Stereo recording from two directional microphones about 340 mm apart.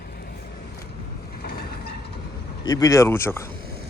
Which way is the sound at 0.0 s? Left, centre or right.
Left.